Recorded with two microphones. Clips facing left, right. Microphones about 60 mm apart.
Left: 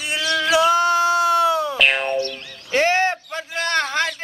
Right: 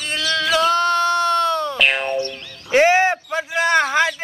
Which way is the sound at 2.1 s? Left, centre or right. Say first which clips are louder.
Even; right.